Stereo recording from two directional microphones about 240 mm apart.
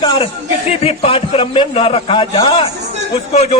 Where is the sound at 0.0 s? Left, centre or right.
Centre.